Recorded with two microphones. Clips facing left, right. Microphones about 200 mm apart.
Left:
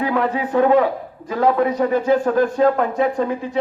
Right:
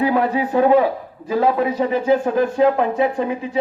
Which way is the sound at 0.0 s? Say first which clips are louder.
Right 2 dB; 30° right (ahead or behind).